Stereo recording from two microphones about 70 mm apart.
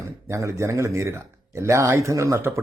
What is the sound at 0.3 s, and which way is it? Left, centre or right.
Speech, right.